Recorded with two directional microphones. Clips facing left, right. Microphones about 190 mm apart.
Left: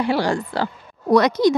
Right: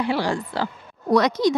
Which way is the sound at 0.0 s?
45° left (ahead or behind).